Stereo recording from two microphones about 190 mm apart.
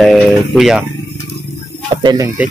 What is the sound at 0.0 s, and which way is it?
Music, centre (ahead or behind).